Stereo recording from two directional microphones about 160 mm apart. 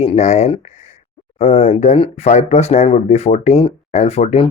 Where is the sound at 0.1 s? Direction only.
45° left (ahead or behind).